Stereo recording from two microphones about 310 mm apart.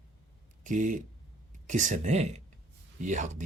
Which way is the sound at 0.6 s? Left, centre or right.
Right.